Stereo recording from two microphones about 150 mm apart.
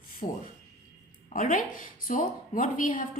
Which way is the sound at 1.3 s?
55° left (ahead or behind).